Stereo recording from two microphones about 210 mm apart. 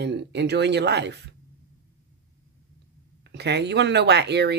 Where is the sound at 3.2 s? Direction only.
55° right (ahead or behind).